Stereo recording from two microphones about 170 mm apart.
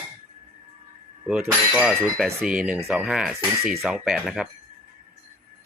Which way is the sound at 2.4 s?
55° right (ahead or behind).